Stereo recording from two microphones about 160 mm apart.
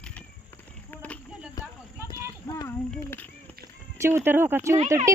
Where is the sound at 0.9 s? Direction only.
10° left (ahead or behind).